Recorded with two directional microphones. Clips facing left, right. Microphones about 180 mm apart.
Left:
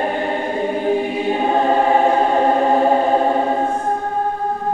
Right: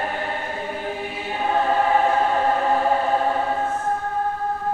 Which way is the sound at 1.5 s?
25° left (ahead or behind).